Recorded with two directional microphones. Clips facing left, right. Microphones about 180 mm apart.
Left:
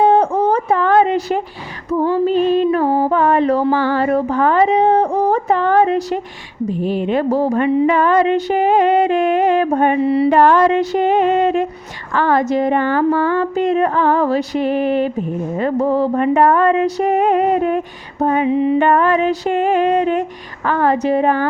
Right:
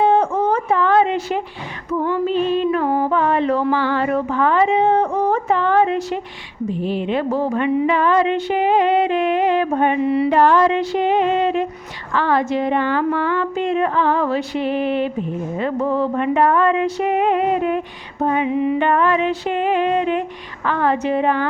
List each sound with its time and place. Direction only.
0.0 s a sound: 40° left (ahead or behind)
6.7 s speech: 45° left (ahead or behind)
10.2 s a woman's voice: 50° left (ahead or behind); by 18.8 s 30° left (ahead or behind)
18.8 s a woman's voice: 45° left (ahead or behind)